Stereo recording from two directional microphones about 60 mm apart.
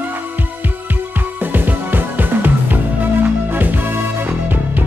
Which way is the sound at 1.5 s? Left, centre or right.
Right.